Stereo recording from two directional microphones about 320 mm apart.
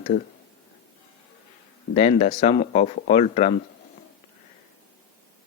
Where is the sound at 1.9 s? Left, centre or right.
Centre.